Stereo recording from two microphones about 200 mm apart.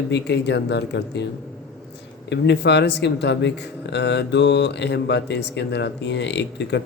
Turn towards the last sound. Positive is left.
turn(degrees=60)  # may be behind; listen again after turning